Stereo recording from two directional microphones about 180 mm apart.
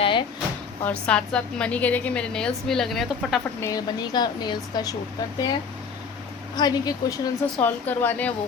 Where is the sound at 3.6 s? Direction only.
20° left (ahead or behind).